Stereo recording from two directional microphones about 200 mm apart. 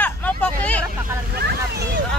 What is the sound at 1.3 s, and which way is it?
Speech, 50° right (ahead or behind).